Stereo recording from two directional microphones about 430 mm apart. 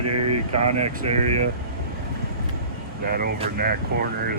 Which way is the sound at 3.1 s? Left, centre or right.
Centre.